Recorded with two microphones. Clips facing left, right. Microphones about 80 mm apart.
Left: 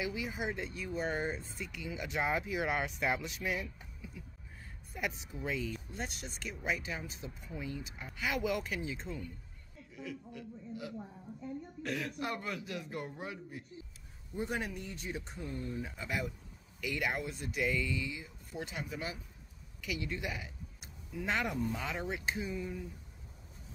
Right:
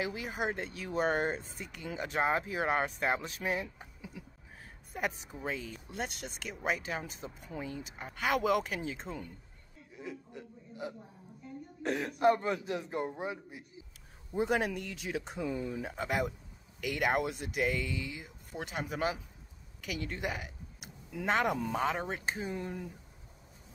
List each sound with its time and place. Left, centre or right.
0.0 s speech: right
0.7 s speech: right
1.6 s speech: right
4.2 s a sound: right
4.9 s speech: right
5.9 s speech: right
9.9 s a man's voice: right
14.3 s speech: right
22.5 s speech: right